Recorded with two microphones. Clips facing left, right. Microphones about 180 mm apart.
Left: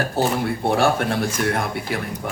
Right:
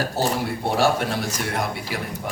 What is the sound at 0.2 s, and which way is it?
A man's voice, 55° left (ahead or behind).